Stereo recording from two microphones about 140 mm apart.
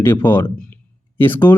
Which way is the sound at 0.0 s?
15° left (ahead or behind).